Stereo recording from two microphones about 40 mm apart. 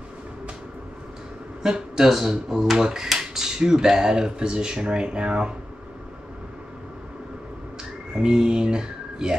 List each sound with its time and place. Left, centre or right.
1.6 s speech: centre
8.1 s speech: centre